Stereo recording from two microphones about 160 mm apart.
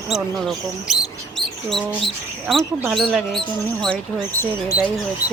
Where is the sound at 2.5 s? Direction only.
Centre (ahead or behind).